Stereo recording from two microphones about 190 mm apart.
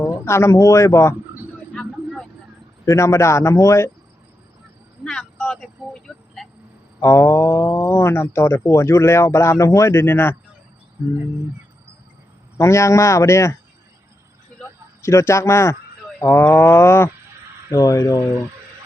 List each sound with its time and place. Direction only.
0.0 s speech: 15° left (ahead or behind)
1.7 s vehicle: 5° left (ahead or behind)
2.8 s speech: 15° left (ahead or behind)
5.0 s vehicle: 5° left (ahead or behind)
7.0 s speech: 15° left (ahead or behind)
12.5 s speech: 15° left (ahead or behind)
15.0 s speech: 15° left (ahead or behind)